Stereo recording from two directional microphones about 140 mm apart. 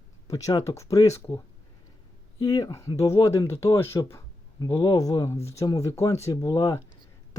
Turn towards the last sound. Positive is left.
turn(degrees=20)  # may be behind; listen again after turning